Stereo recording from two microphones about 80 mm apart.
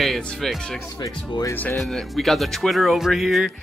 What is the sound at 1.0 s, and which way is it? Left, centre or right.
Speech, left.